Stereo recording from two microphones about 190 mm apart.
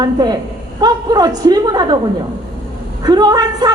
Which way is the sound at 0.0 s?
20° right (ahead or behind).